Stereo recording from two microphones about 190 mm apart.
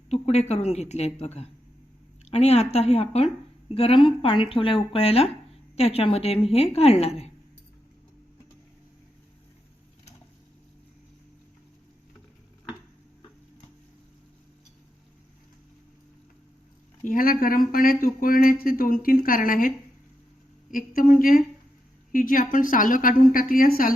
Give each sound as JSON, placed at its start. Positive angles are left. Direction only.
{"t": 0.1, "sound": "a woman's voice", "side_deg": 35}
{"t": 17.0, "sound": "speech", "side_deg": 45}